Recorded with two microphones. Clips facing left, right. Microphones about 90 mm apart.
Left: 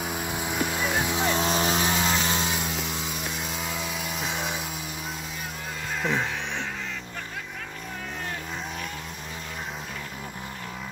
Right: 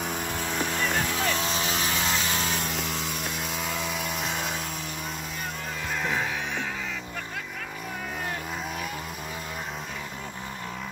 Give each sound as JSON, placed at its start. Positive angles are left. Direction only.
{"t": 0.0, "sound": "vehicle", "side_deg": 5}
{"t": 1.4, "sound": "vehicle", "side_deg": 30}
{"t": 2.0, "sound": "vehicle", "side_deg": 10}
{"t": 2.5, "sound": "vehicle", "side_deg": 0}